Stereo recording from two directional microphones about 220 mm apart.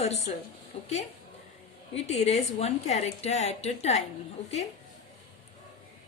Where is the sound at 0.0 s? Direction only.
30° left (ahead or behind).